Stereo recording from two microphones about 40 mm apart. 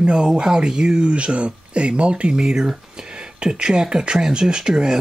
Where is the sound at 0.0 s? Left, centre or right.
Right.